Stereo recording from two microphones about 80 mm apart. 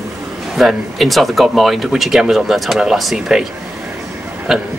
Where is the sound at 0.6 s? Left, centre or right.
Centre.